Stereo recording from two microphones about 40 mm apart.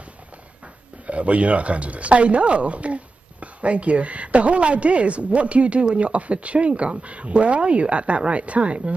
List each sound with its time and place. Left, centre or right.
1.0 s speech: right